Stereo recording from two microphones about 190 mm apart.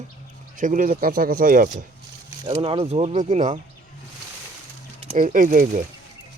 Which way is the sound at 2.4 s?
25° right (ahead or behind).